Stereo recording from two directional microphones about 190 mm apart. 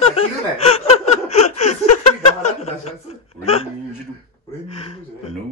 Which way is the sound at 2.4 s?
35° left (ahead or behind).